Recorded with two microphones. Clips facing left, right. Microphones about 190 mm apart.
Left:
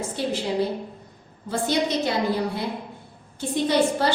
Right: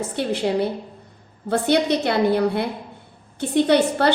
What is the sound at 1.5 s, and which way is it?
A woman's voice, 65° right (ahead or behind).